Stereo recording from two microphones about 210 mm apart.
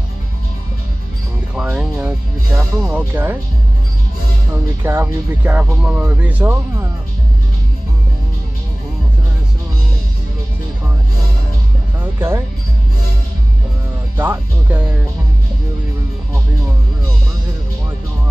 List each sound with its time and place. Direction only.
1.5 s music: 5° right (ahead or behind)
4.8 s speech: 10° right (ahead or behind)
14.1 s speech: 10° right (ahead or behind)